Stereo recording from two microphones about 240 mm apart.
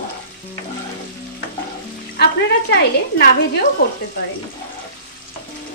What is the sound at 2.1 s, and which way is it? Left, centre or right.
Speech, left.